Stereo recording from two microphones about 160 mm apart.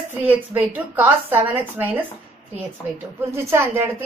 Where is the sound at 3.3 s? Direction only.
15° right (ahead or behind).